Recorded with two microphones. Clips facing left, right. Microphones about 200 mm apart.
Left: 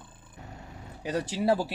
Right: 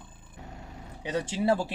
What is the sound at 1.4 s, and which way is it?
Speech, 5° left (ahead or behind).